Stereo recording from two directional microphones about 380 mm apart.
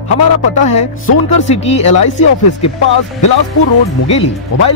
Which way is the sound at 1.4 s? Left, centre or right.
Centre.